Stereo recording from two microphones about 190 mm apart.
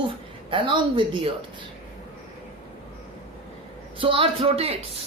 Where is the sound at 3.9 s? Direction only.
30° right (ahead or behind).